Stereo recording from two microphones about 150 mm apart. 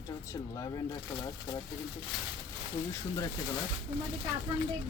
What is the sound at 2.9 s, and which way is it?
Speech, 25° left (ahead or behind).